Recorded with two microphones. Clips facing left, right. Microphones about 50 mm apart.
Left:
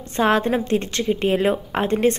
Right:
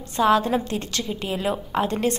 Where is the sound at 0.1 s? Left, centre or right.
Left.